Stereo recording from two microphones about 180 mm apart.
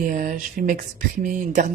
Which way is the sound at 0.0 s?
45° right (ahead or behind).